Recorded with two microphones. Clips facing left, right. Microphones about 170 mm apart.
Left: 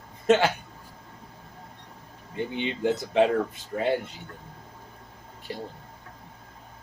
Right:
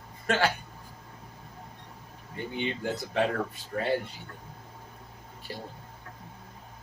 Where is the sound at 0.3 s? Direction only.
20° left (ahead or behind).